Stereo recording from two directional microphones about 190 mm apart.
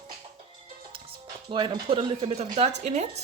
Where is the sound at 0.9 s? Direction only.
25° right (ahead or behind).